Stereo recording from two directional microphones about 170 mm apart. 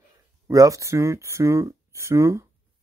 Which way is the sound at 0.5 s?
20° right (ahead or behind).